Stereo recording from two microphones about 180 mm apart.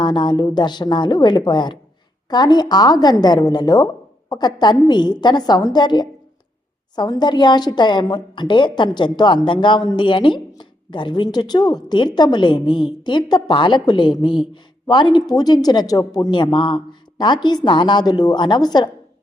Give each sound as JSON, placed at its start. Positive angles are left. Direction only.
{"t": 0.0, "sound": "speech", "side_deg": 25}